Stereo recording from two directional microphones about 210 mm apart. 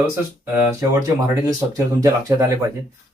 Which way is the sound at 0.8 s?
15° right (ahead or behind).